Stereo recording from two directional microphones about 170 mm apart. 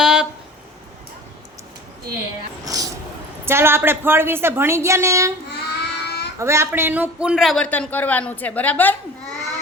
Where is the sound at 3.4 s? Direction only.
15° right (ahead or behind).